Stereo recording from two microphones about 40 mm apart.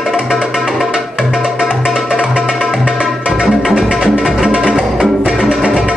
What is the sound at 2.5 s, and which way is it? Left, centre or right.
Music, centre.